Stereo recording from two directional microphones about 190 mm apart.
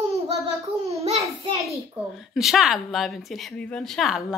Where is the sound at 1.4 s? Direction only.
35° right (ahead or behind).